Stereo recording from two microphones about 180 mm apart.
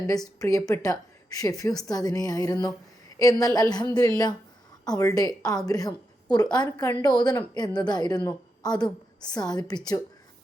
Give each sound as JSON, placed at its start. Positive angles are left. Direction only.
{"t": 0.3, "sound": "a woman's voice", "side_deg": 15}